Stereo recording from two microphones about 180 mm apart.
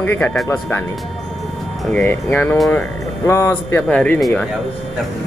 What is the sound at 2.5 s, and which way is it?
Speech, centre (ahead or behind).